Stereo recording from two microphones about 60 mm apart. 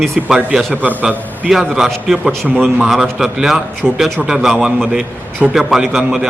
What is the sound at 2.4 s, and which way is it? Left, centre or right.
Speech, centre.